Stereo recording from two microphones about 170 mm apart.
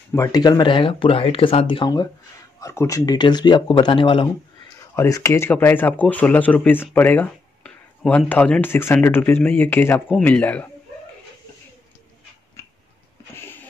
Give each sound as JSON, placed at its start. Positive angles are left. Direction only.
{"t": 0.1, "sound": "speech", "side_deg": 20}
{"t": 4.9, "sound": "speech", "side_deg": 20}